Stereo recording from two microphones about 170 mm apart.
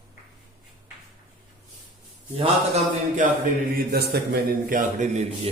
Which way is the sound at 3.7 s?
65° right (ahead or behind).